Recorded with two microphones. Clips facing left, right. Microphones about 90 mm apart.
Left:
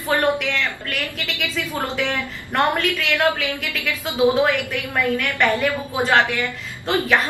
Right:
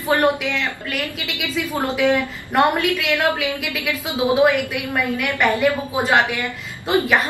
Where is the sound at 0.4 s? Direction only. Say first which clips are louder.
Even; 10° right (ahead or behind).